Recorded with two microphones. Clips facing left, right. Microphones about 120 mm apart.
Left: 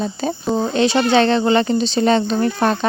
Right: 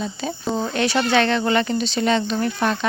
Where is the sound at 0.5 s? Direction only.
25° left (ahead or behind).